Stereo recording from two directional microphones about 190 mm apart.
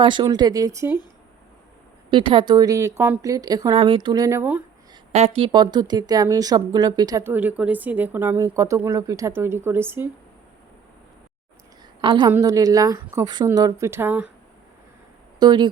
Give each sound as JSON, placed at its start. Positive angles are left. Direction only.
{"t": 0.0, "sound": "speech", "side_deg": -25}
{"t": 2.0, "sound": "speech", "side_deg": -25}
{"t": 5.1, "sound": "speech", "side_deg": -30}
{"t": 12.0, "sound": "speech", "side_deg": -25}
{"t": 15.4, "sound": "speech", "side_deg": -25}